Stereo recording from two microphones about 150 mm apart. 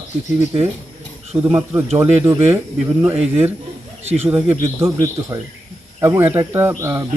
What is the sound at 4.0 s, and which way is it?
Speech, 45° right (ahead or behind).